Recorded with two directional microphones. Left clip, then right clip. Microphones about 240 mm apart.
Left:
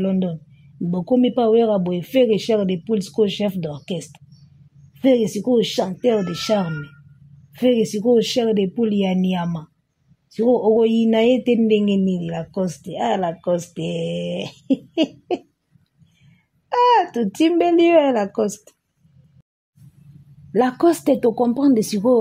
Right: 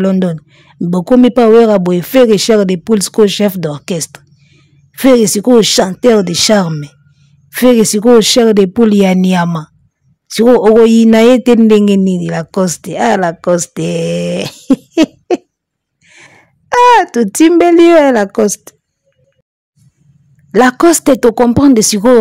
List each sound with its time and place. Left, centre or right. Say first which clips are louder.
0.0 s a man's voice: right 10 dB; right
20.5 s a man's voice: right 10 dB; right